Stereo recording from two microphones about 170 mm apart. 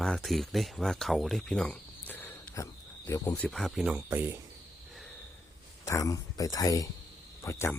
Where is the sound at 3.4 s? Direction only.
Centre (ahead or behind).